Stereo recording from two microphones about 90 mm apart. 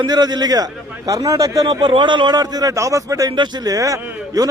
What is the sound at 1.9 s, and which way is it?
A man's voice, 60° right (ahead or behind).